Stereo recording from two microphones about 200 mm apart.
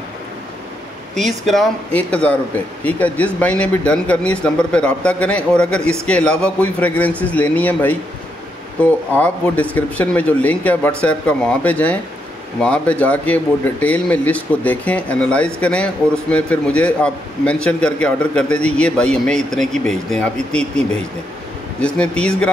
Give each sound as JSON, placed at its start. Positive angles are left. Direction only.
{"t": 1.1, "sound": "speech", "side_deg": 0}